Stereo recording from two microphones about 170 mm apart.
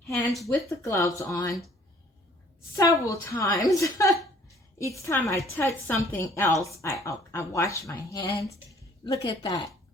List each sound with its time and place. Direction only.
0.4 s speech: 15° left (ahead or behind)
2.7 s speech: 20° left (ahead or behind)